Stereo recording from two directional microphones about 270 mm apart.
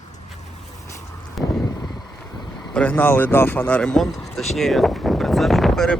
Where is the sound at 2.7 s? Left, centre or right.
Centre.